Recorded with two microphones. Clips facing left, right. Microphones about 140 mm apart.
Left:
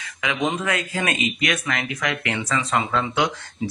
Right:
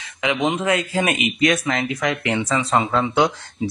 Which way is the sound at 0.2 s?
20° right (ahead or behind).